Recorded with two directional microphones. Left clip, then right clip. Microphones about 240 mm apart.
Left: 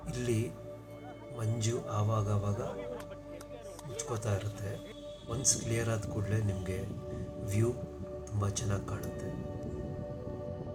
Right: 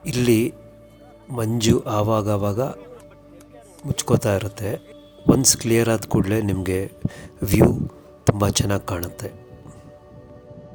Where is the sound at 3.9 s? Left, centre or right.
Right.